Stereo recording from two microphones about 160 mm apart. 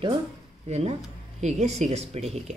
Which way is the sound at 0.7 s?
45° right (ahead or behind).